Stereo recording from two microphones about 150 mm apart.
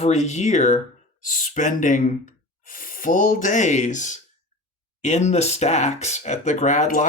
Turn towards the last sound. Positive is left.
turn(degrees=55)  # may be behind; listen again after turning